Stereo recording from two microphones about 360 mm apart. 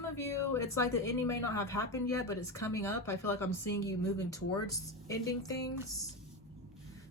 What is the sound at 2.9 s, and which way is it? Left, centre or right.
Speech, left.